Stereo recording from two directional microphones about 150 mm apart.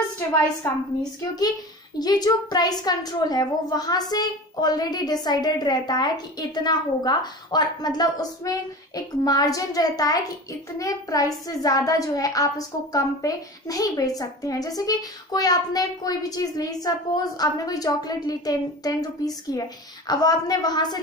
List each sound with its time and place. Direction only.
2.0 s a child's voice: 25° left (ahead or behind)